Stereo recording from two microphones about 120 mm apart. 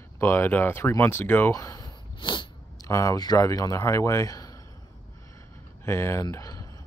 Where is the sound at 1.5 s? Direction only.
30° left (ahead or behind).